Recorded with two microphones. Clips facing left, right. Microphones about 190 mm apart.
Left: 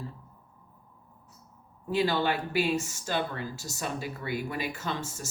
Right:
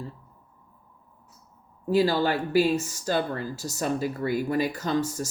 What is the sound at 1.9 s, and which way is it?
Speech, 35° right (ahead or behind).